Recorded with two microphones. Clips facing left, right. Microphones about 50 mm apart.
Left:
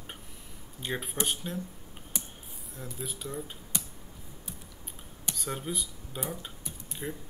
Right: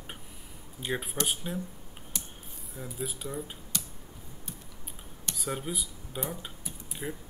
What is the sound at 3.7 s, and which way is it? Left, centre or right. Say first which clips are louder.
Computer keyboard: even; centre.